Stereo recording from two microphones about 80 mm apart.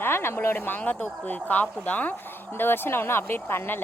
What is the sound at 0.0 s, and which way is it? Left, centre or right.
Speech, left.